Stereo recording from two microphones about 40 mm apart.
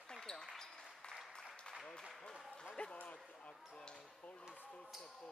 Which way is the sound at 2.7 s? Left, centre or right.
Left.